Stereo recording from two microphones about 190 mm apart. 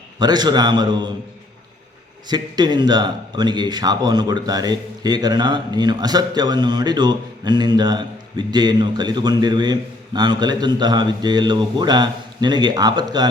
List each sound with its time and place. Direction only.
0.2 s a man's voice: 20° right (ahead or behind)
2.2 s a man's voice: 20° right (ahead or behind)